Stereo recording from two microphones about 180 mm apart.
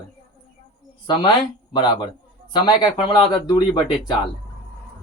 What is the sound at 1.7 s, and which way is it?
Speech, 25° left (ahead or behind).